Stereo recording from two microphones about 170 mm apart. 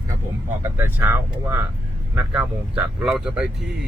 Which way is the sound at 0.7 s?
10° right (ahead or behind).